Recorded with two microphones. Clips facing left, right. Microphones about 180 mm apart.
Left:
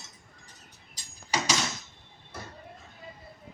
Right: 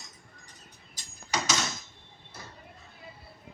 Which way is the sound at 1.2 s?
10° left (ahead or behind).